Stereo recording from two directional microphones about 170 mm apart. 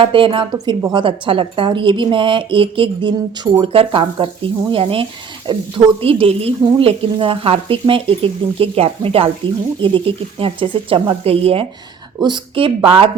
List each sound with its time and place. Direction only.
0.0 s a woman's voice: 30° right (ahead or behind)